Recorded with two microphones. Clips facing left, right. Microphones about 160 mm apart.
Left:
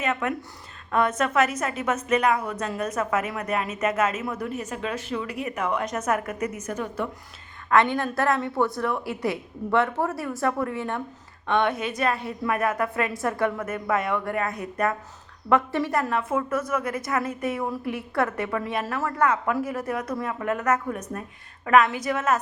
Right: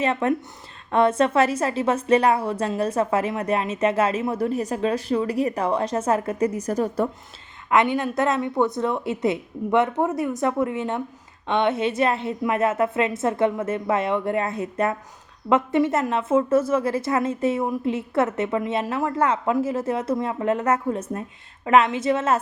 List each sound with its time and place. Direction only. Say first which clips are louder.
0.0 s a woman's voice: right 5 dB; 30° right (ahead or behind)
7.7 s a woman's voice: right 1 dB; 20° right (ahead or behind)